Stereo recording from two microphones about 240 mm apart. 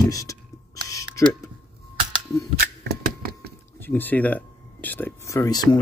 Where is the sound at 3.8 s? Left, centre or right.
Centre.